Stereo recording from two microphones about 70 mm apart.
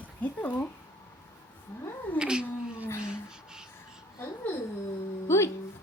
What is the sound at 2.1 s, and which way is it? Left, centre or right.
Cat, centre.